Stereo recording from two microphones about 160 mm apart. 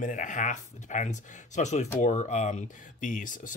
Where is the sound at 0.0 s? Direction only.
55° left (ahead or behind).